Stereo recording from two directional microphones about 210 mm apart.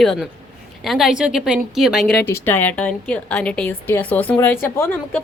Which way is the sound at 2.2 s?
10° left (ahead or behind).